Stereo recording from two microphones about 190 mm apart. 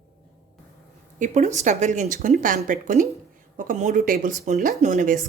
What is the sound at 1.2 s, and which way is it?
A woman's voice, 40° right (ahead or behind).